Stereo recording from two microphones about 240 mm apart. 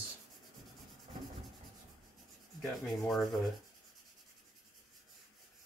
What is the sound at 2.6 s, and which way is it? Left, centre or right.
Speech, centre.